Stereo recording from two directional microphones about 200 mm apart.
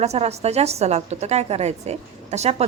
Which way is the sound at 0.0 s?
30° right (ahead or behind).